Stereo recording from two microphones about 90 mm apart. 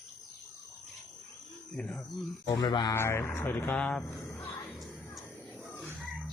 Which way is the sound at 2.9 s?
30° left (ahead or behind).